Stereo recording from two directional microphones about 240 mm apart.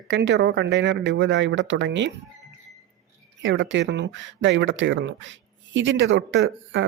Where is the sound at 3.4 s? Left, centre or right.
Right.